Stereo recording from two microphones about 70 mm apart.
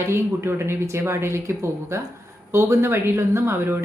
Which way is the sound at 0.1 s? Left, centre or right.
Right.